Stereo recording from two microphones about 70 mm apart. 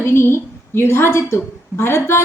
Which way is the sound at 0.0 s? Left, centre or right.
Left.